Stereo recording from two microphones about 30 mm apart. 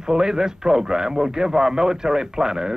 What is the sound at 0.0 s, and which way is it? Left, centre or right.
A man's voice, right.